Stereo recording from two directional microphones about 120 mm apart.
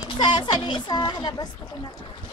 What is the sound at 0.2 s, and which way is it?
Speech, 40° left (ahead or behind).